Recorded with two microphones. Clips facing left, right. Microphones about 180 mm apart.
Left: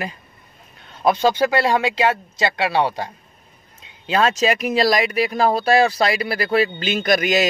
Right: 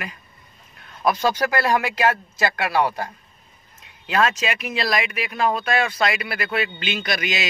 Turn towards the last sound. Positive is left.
turn(degrees=45)  # may be behind; listen again after turning